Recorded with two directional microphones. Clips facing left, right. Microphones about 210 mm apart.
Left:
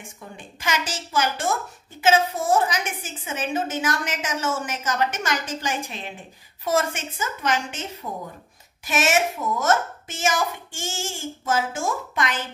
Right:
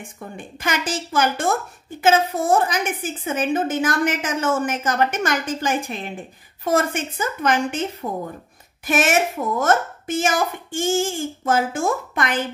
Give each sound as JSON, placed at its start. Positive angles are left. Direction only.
{"t": 0.4, "sound": "a woman's voice", "side_deg": -55}